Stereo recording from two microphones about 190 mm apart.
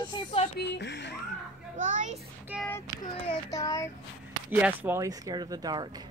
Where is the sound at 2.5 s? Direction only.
5° right (ahead or behind).